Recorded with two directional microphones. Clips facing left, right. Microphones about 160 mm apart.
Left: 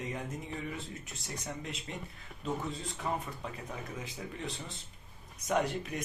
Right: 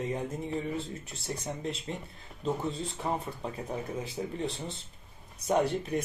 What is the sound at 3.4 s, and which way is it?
Speech, 30° right (ahead or behind).